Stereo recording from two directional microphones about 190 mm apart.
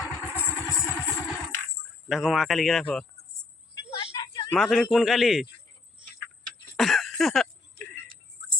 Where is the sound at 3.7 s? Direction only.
25° left (ahead or behind).